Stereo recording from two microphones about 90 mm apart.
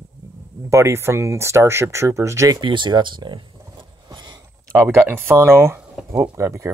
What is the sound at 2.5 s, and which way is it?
Speech, 60° right (ahead or behind).